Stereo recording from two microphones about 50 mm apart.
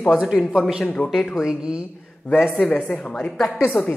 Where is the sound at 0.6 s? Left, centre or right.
Centre.